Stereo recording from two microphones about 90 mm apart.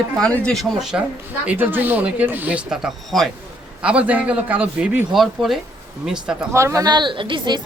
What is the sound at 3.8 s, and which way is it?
Speech, 15° right (ahead or behind).